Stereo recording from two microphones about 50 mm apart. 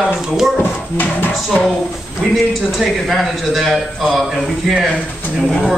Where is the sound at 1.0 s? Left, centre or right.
Left.